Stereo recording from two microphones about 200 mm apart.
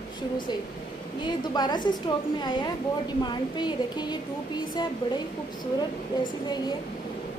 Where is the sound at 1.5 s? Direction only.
20° left (ahead or behind).